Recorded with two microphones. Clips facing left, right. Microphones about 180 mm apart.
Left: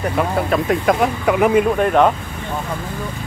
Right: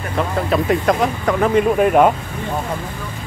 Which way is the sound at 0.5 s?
Centre (ahead or behind).